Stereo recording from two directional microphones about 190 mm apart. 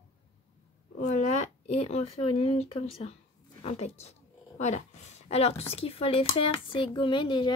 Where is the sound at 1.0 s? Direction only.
35° left (ahead or behind).